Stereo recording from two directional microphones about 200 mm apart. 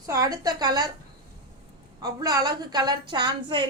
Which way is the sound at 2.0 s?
20° right (ahead or behind).